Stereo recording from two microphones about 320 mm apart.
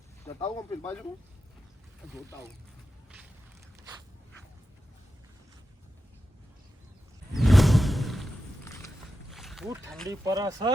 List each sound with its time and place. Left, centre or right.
0.3 s speech: centre
7.3 s a sound: centre
9.3 s boat: centre
10.1 s speech: centre